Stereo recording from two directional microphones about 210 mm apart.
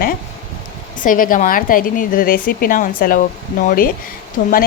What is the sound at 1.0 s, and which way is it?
A woman's voice, 40° left (ahead or behind).